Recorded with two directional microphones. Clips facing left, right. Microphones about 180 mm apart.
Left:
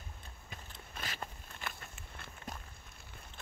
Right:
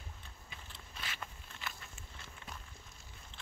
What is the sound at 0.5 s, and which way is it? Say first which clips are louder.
Biting: left 4 dB; 45° left (ahead or behind).